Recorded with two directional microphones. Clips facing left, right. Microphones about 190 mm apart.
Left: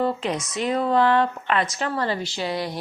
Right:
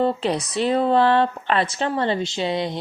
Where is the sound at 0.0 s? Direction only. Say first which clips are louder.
Right 3 dB; 35° right (ahead or behind).